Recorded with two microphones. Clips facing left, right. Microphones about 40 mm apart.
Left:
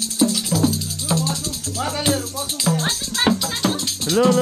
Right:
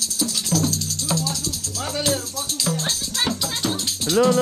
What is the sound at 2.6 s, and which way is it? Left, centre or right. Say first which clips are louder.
Music: left 4 dB; centre.